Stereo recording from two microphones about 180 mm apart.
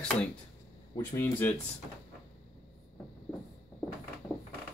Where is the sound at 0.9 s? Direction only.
10° left (ahead or behind).